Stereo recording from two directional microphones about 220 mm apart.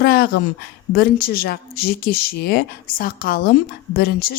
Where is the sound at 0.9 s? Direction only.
45° left (ahead or behind).